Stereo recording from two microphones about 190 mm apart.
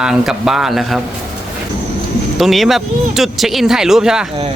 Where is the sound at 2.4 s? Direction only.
Centre (ahead or behind).